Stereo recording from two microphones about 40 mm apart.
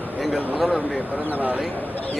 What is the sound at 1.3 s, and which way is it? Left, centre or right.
Speech, right.